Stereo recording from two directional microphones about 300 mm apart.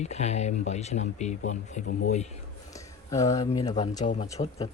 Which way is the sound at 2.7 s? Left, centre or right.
Centre.